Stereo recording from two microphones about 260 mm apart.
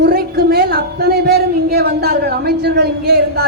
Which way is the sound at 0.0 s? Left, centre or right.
Right.